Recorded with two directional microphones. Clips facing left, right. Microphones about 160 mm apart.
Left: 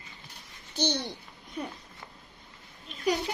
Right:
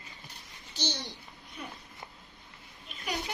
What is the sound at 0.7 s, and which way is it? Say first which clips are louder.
Speech: left 7 dB; 60° left (ahead or behind).